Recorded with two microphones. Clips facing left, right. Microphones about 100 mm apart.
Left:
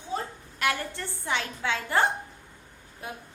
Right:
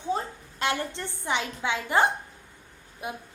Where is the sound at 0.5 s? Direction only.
25° right (ahead or behind).